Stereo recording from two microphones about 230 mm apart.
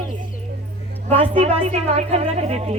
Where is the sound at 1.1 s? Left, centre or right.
Right.